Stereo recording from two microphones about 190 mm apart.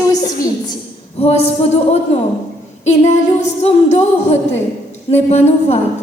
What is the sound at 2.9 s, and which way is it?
Music, 35° left (ahead or behind).